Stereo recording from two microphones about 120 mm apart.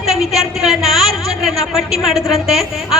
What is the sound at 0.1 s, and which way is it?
A woman's voice, centre (ahead or behind).